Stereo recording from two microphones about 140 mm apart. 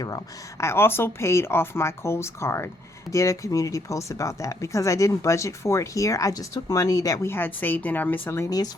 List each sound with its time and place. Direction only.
0.6 s speech: 15° left (ahead or behind)